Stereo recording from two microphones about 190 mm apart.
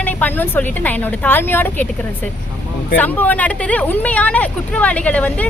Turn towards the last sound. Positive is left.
turn(degrees=5)  # may be behind; listen again after turning